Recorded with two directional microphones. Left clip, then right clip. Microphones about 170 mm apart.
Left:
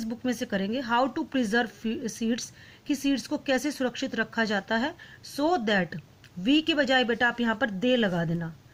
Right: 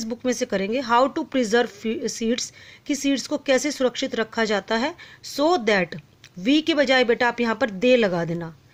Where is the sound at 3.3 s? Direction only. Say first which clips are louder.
Right 6 dB; 35° right (ahead or behind).